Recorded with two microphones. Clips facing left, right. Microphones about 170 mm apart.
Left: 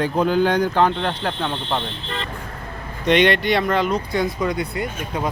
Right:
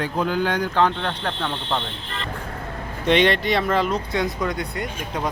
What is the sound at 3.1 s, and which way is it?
Speech, centre (ahead or behind).